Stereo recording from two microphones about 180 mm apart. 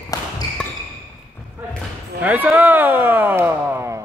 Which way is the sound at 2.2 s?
10° right (ahead or behind).